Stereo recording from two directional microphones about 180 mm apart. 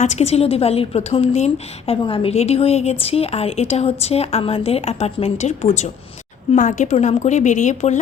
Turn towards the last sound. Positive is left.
turn(degrees=40)  # may be behind; listen again after turning